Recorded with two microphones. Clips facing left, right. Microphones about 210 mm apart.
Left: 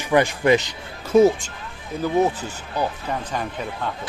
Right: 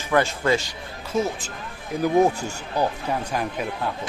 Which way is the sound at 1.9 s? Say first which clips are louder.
Right 1 dB; 10° right (ahead or behind).